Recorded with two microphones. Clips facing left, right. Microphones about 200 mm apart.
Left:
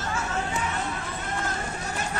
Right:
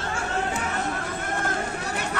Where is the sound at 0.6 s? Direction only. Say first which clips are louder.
Right 2 dB; 50° right (ahead or behind).